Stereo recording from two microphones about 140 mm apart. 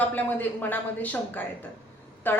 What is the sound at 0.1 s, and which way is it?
A woman's voice, 15° left (ahead or behind).